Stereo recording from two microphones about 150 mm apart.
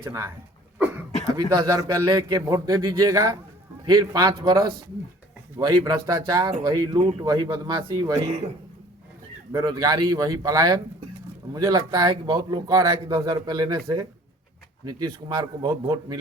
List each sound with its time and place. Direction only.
0.0 s a man's voice: 20° right (ahead or behind)
1.4 s a man's voice: 20° right (ahead or behind)
9.5 s a man's voice: 30° right (ahead or behind)